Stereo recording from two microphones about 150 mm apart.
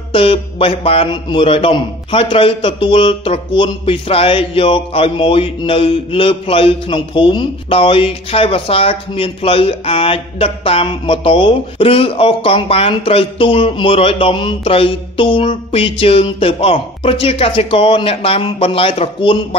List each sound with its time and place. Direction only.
0.1 s a man's voice: 40° left (ahead or behind)